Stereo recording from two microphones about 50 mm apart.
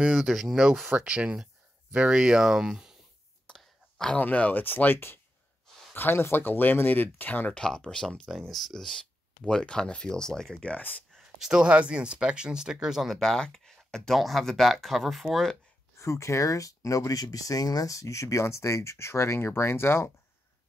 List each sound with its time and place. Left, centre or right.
0.2 s speech: centre
0.9 s speech: right
3.4 s a sound: centre
4.2 s speech: left
7.5 s speech: centre
8.3 s speech: centre
11.4 s speech: right
13.1 s speech: centre
16.0 s speech: left